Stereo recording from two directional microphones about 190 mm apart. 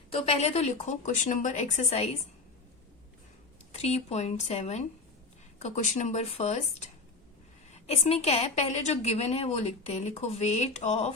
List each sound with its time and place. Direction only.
0.1 s a woman's voice: 30° left (ahead or behind)
3.7 s a woman's voice: 35° left (ahead or behind)